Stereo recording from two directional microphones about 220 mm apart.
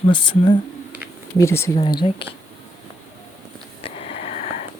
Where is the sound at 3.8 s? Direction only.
25° left (ahead or behind).